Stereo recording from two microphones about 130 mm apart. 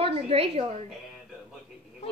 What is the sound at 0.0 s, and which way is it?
Speech, 50° right (ahead or behind).